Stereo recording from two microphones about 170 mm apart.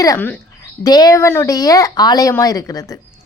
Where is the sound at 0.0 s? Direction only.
15° left (ahead or behind).